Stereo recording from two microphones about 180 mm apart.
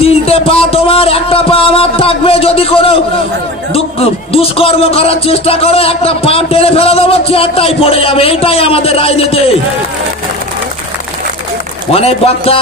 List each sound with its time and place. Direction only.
0.0 s speech: 35° left (ahead or behind)
11.9 s speech: 35° left (ahead or behind)